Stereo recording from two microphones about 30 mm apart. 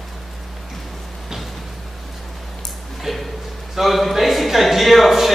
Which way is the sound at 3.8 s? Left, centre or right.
Centre.